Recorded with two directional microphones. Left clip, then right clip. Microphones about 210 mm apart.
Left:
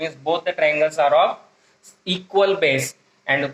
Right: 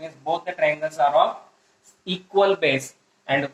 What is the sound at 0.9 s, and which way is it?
A man's voice, 40° left (ahead or behind).